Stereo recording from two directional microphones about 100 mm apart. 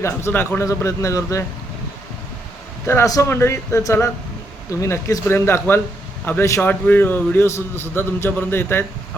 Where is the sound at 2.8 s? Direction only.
30° left (ahead or behind).